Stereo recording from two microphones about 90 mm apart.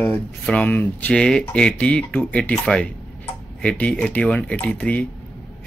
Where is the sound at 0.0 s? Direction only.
15° left (ahead or behind).